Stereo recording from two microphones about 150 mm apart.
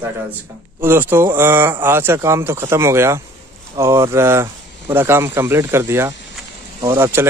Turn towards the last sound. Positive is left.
turn(degrees=-15)  # may be behind; listen again after turning